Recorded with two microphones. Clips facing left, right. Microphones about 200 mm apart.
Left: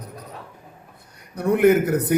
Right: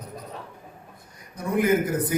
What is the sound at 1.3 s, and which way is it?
Speech, 65° left (ahead or behind).